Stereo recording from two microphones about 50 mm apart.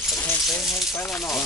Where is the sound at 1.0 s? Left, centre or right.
Left.